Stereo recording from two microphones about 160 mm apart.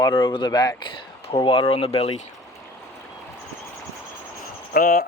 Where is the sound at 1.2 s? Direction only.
40° left (ahead or behind).